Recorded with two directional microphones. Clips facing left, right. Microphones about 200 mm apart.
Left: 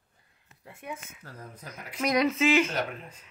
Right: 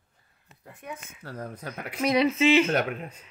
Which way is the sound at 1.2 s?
75° right (ahead or behind).